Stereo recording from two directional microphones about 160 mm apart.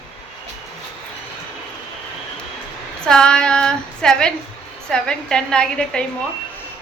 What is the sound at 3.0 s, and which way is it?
A woman's voice, 5° left (ahead or behind).